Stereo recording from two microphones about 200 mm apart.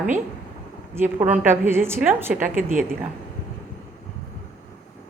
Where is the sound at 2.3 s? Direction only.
40° right (ahead or behind).